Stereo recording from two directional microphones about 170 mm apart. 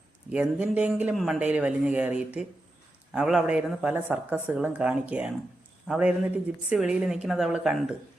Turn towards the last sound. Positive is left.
turn(degrees=-5)  # may be behind; listen again after turning